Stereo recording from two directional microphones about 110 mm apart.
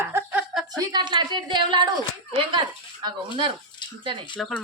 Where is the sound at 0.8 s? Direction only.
40° right (ahead or behind).